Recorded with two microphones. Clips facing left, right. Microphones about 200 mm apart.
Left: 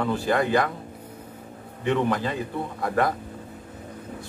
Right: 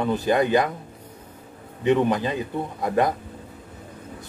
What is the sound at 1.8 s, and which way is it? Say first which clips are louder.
Speech: right 4 dB; 20° right (ahead or behind).